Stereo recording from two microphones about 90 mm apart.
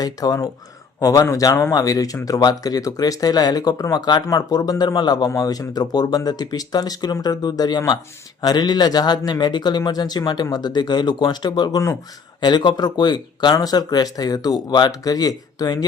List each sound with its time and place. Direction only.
0.0 s speech: 45° left (ahead or behind)